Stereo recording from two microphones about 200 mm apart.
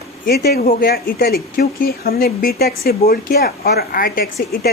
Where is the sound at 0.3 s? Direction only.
50° left (ahead or behind).